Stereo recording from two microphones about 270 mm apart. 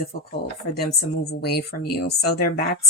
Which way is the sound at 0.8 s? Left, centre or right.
Left.